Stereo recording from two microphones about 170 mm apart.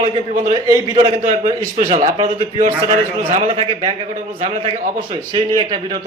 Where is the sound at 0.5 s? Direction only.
25° right (ahead or behind).